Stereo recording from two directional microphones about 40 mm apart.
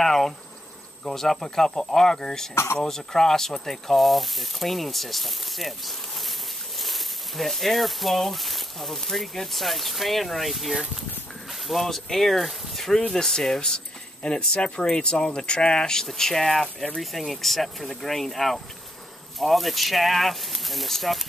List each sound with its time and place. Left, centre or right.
0.0 s speech: centre
2.5 s speech: left
2.8 s speech: centre